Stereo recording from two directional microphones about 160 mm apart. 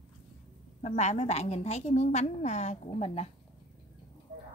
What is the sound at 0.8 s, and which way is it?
A woman's voice, 45° left (ahead or behind).